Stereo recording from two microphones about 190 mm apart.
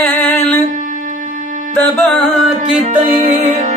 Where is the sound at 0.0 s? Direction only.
5° left (ahead or behind).